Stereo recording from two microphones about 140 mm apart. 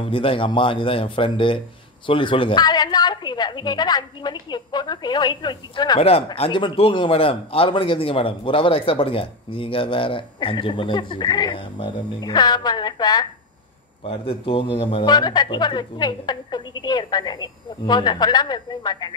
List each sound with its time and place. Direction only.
0.0 s a man's voice: 40° left (ahead or behind)
5.9 s a man's voice: 45° left (ahead or behind)
14.0 s a man's voice: 40° left (ahead or behind)